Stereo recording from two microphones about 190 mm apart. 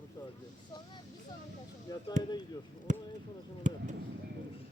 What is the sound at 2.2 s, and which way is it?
Speech, 40° right (ahead or behind).